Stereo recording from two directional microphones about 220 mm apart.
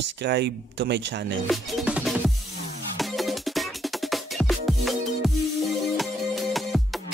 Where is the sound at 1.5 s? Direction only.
Centre (ahead or behind).